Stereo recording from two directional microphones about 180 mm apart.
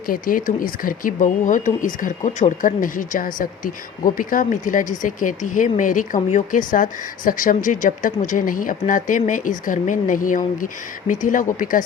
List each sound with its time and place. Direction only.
0.1 s speech: 50° left (ahead or behind)